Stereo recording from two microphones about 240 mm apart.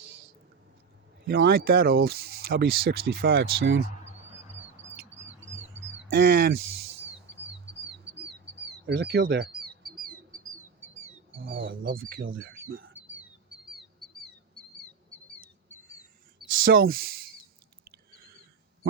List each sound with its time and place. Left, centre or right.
1.2 s speech: right
3.6 s speech: right
6.1 s speech: right
7.9 s bird: right
11.4 s a sound: right
11.8 s speech: right
13.1 s bird: centre
16.6 s speech: right
18.1 s a sound: right